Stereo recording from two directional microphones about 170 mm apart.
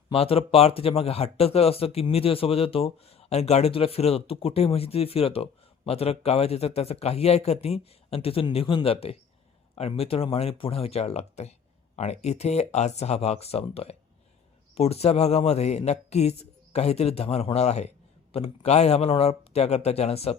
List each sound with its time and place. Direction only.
0.1 s speech: 35° left (ahead or behind)